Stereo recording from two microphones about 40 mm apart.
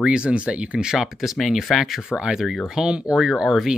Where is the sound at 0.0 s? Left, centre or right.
Right.